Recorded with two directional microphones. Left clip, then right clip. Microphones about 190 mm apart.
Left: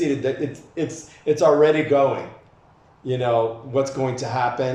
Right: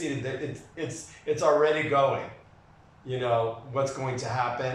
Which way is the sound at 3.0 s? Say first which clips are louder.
Left 6 dB; 45° left (ahead or behind).